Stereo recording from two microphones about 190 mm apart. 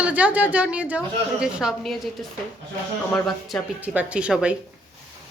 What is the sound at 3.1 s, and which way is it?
Speech, centre (ahead or behind).